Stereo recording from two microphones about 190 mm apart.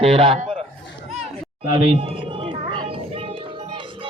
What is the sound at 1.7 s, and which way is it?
Bird, 30° right (ahead or behind).